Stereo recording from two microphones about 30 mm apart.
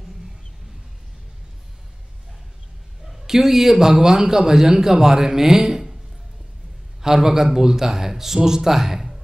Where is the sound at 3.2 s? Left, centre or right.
Centre.